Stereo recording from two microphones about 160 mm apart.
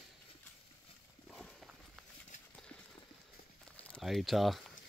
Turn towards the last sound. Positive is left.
turn(degrees=0)  # may be behind; listen again after turning